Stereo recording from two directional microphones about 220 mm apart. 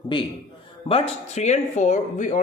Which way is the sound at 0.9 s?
30° left (ahead or behind).